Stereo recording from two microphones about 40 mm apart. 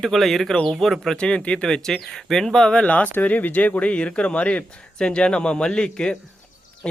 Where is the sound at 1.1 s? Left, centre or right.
Left.